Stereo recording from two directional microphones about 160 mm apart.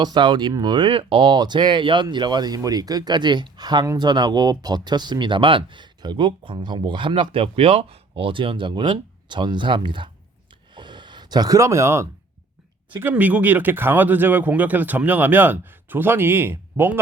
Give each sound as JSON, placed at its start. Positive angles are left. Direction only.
{"t": 0.0, "sound": "speech", "side_deg": -30}
{"t": 10.8, "sound": "gasp", "side_deg": -30}
{"t": 13.0, "sound": "speech", "side_deg": -10}